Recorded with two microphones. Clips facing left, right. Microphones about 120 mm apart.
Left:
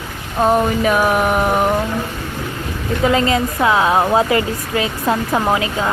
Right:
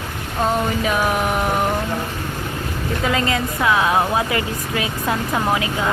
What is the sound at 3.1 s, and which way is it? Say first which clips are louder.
A woman's voice: left 5 dB; 25° left (ahead or behind).